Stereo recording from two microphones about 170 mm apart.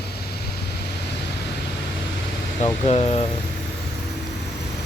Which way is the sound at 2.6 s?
35° left (ahead or behind).